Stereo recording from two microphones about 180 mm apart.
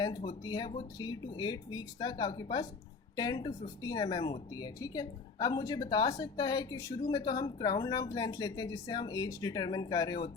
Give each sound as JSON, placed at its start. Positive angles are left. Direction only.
{"t": 0.0, "sound": "speech", "side_deg": 25}